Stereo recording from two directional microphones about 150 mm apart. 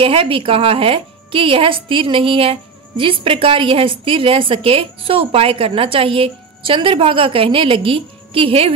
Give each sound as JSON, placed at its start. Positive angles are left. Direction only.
{"t": 0.0, "sound": "a woman's voice", "side_deg": -35}